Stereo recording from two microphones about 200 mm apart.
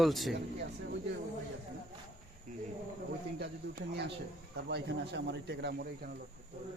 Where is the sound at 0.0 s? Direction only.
Centre (ahead or behind).